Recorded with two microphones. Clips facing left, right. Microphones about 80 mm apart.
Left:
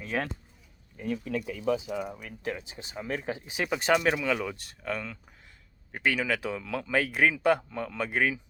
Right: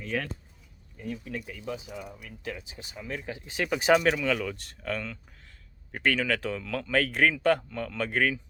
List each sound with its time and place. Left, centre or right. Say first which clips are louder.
0.1 s speech: left 1 dB; left
0.9 s speech: left 4 dB; left
1.2 s speech: left 5 dB; centre
2.1 s speech: left 3 dB; left
3.4 s speech: right 5 dB; centre
3.8 s speech: right 3 dB; centre
4.1 s speech: even; centre